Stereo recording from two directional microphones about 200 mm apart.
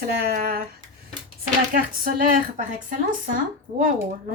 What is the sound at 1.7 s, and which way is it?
Speech, 45° right (ahead or behind).